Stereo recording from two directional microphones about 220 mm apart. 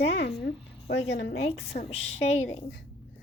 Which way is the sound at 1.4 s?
30° left (ahead or behind).